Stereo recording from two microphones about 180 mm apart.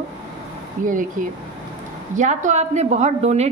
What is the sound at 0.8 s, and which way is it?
A woman's voice, 50° right (ahead or behind).